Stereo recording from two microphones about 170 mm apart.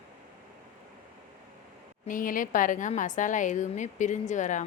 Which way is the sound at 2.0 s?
55° left (ahead or behind).